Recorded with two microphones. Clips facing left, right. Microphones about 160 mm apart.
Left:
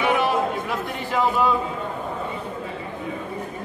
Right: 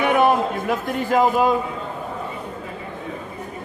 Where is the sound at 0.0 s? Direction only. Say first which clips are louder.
Right 4 dB; 50° right (ahead or behind).